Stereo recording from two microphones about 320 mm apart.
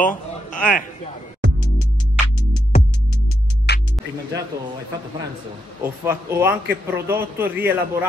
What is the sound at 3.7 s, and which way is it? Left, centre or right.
Music, left.